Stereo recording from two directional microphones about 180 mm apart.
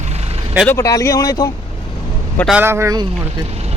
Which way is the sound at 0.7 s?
20° left (ahead or behind).